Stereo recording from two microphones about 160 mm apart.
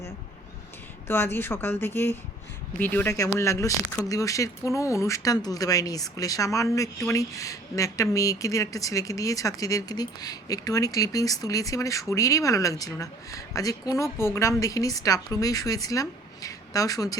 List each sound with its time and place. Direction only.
1.0 s speech: 15° left (ahead or behind)